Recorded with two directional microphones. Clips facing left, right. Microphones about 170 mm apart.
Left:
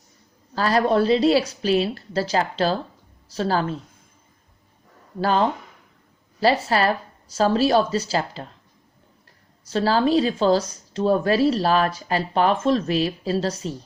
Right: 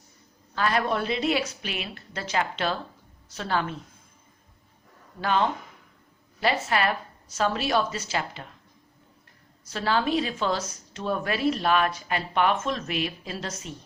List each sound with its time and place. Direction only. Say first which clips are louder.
0.5 s speech: left 6 dB; 35° left (ahead or behind)
5.2 s speech: left 4 dB; 35° left (ahead or behind)
9.6 s speech: left 6 dB; 30° left (ahead or behind)